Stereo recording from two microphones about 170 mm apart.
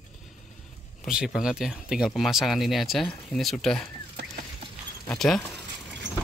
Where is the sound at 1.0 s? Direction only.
5° right (ahead or behind).